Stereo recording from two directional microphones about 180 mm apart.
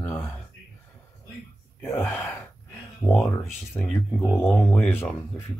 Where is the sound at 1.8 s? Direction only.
15° left (ahead or behind).